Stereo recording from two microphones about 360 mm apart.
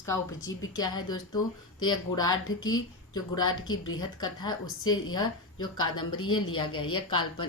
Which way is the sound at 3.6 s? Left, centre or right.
Left.